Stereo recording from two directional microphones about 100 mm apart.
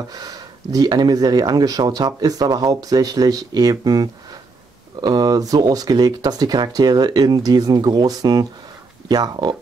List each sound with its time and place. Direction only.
0.1 s speech: 40° right (ahead or behind)